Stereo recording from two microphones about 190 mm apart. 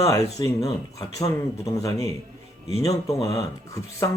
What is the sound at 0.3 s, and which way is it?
Speech, 15° left (ahead or behind).